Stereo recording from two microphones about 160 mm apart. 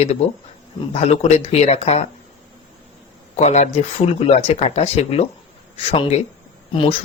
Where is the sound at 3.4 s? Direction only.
45° left (ahead or behind).